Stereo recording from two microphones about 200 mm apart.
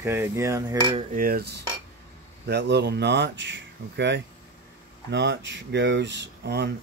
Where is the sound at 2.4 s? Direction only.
55° right (ahead or behind).